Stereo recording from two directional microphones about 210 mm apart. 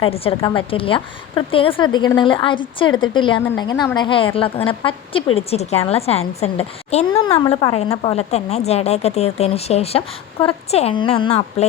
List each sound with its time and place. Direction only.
0.0 s a woman's voice: 25° left (ahead or behind)